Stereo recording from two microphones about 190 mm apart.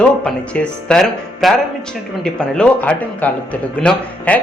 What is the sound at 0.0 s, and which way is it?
A man's voice, 5° left (ahead or behind).